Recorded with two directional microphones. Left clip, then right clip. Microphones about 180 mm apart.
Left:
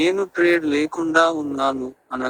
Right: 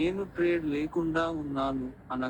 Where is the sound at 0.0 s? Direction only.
65° left (ahead or behind).